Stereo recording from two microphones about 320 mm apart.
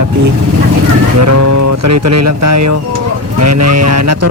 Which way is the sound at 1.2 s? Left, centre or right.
Right.